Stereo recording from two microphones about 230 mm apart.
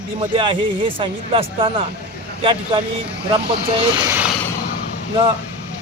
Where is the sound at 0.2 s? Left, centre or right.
Right.